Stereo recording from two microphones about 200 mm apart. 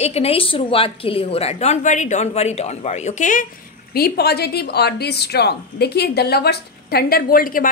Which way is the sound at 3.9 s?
50° left (ahead or behind).